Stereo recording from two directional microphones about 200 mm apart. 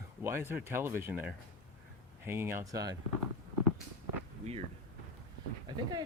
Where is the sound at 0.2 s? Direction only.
10° right (ahead or behind).